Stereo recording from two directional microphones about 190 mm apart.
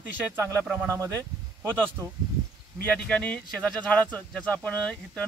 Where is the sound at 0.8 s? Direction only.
15° right (ahead or behind).